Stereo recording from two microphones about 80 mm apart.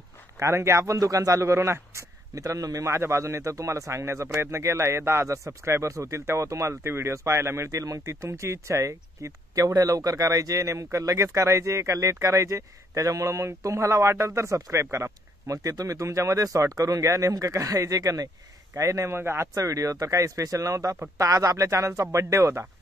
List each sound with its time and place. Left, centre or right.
0.4 s speech: right
18.8 s speech: right